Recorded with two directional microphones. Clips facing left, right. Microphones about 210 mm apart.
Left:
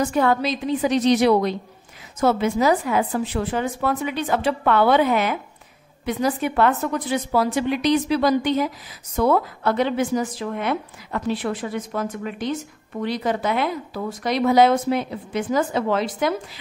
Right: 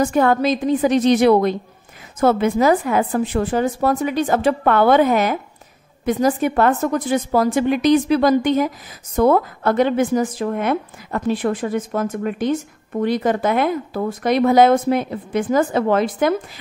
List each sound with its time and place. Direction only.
0.0 s a woman's voice: 50° right (ahead or behind)